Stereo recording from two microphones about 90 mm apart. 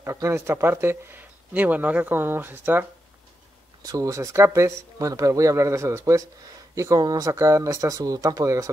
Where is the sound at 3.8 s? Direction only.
40° right (ahead or behind).